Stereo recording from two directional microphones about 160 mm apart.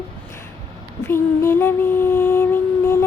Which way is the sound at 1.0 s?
15° left (ahead or behind).